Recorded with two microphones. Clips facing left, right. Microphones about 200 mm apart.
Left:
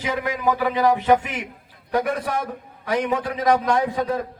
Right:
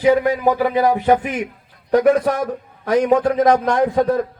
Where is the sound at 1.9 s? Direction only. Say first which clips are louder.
Right 9 dB; 55° right (ahead or behind).